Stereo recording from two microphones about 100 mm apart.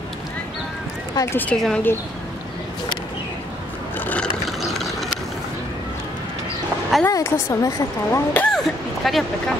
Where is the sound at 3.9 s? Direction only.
15° left (ahead or behind).